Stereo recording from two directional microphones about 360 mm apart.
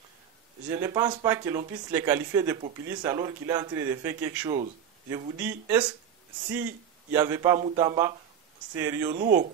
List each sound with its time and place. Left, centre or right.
0.7 s a man's voice: centre
9.1 s speech: right